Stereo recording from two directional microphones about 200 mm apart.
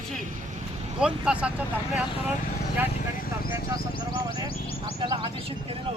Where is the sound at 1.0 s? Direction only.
5° right (ahead or behind).